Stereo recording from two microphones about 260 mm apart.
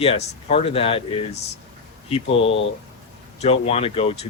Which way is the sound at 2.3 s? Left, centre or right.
Left.